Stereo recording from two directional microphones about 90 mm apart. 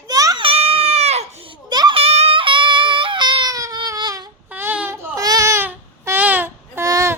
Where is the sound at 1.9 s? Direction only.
90° right; by 3.6 s 55° right (ahead or behind).